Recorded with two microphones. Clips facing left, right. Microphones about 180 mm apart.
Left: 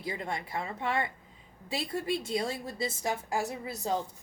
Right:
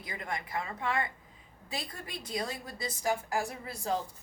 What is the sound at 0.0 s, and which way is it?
A woman's voice, 25° left (ahead or behind).